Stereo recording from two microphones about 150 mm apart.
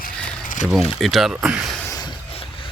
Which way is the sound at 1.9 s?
30° left (ahead or behind).